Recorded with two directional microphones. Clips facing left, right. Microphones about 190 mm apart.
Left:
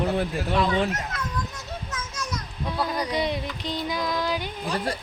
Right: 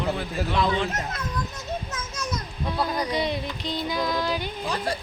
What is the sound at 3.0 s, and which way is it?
Music, 15° left (ahead or behind).